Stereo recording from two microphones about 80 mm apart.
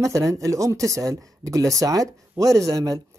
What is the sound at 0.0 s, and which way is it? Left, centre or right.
Speech, right.